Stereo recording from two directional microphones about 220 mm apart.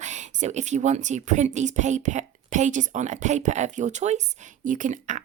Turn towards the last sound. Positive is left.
turn(degrees=-35)  # may be behind; listen again after turning